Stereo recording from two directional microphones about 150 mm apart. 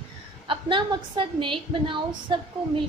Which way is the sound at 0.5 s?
35° right (ahead or behind).